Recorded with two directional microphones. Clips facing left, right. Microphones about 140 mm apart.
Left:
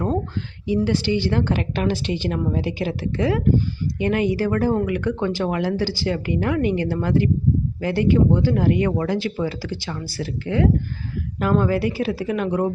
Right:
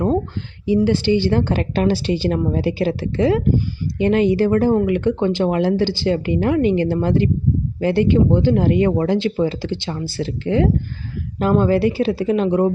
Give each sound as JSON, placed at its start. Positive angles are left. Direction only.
{"t": 0.7, "sound": "a woman's voice", "side_deg": -25}